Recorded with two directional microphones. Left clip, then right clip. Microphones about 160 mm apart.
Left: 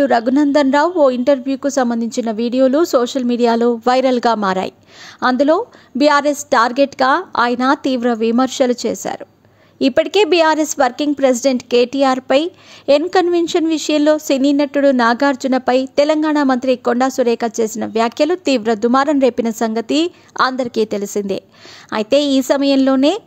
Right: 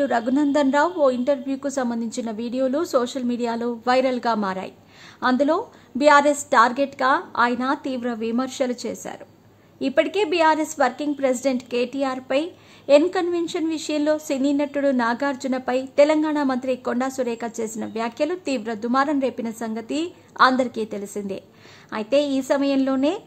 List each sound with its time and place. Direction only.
0.0 s a woman's voice: 35° left (ahead or behind)